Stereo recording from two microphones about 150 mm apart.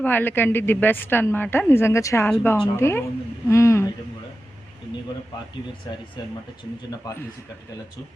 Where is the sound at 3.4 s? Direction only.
20° left (ahead or behind).